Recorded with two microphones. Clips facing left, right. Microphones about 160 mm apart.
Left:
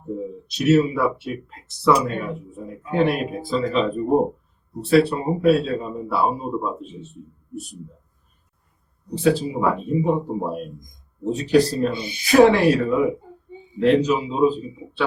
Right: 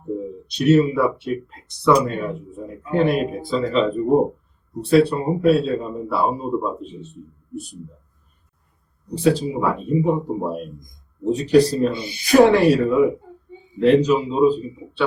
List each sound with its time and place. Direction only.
0.4 s speech: centre (ahead or behind)
9.1 s speech: centre (ahead or behind)